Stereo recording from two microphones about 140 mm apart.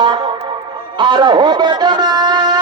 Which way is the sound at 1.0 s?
35° right (ahead or behind).